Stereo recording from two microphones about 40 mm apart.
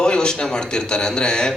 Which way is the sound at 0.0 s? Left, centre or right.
Left.